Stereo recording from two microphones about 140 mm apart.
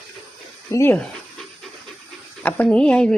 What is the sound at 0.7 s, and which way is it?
Speech, 15° left (ahead or behind).